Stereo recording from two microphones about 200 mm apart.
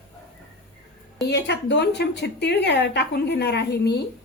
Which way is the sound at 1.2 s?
60° left (ahead or behind).